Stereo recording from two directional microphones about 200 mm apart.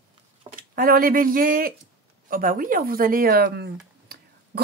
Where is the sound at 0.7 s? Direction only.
45° right (ahead or behind).